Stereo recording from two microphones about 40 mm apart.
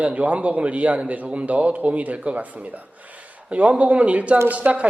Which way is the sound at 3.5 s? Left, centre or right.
Right.